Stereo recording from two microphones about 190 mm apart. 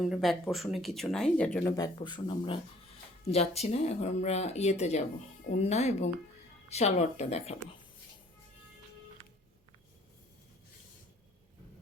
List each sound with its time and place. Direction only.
0.0 s speech: centre (ahead or behind); by 7.5 s 35° left (ahead or behind)